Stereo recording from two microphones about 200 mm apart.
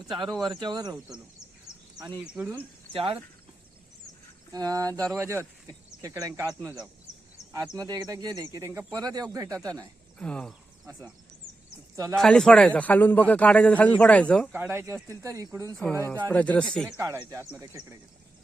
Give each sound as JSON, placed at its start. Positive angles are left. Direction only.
{"t": 0.1, "sound": "speech", "side_deg": 0}
{"t": 0.6, "sound": "speech", "side_deg": -20}
{"t": 2.2, "sound": "speech", "side_deg": -5}
{"t": 2.9, "sound": "speech", "side_deg": -25}
{"t": 4.5, "sound": "speech", "side_deg": -20}
{"t": 10.2, "sound": "speech", "side_deg": 5}
{"t": 10.9, "sound": "speech", "side_deg": -15}
{"t": 12.1, "sound": "a man's voice", "side_deg": 5}
{"t": 14.5, "sound": "speech", "side_deg": -10}
{"t": 16.3, "sound": "speech", "side_deg": 5}
{"t": 17.0, "sound": "speech", "side_deg": -15}